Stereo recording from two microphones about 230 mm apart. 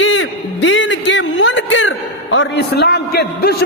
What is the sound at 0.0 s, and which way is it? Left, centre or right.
Music, left.